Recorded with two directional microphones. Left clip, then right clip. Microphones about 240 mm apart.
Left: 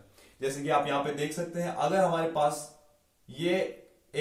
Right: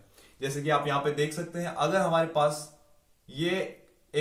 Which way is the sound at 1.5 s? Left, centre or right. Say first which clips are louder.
Even; centre.